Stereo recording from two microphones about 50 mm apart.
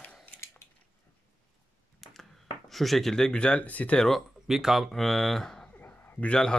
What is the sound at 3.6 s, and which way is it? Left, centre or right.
Speech, left.